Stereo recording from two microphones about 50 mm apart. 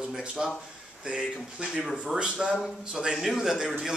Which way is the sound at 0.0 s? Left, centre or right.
Centre.